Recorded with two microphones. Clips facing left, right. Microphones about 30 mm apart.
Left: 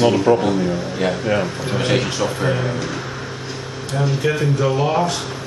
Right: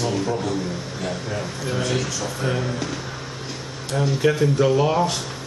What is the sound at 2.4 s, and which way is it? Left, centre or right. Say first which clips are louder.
Speech: left 4 dB; left.